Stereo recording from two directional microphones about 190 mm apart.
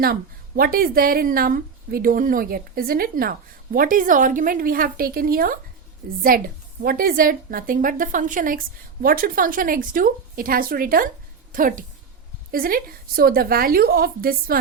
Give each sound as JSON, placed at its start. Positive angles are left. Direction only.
{"t": 0.0, "sound": "speech", "side_deg": -50}